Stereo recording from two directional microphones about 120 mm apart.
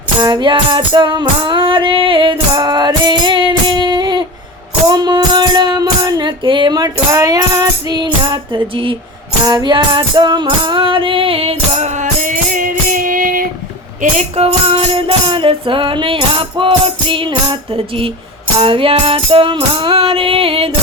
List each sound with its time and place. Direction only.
0.2 s music: 35° right (ahead or behind); by 12.3 s 85° right
14.0 s music: 70° right (ahead or behind); by 20.7 s 50° right (ahead or behind)